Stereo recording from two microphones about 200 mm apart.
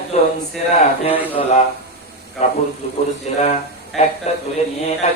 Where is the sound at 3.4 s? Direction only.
35° left (ahead or behind).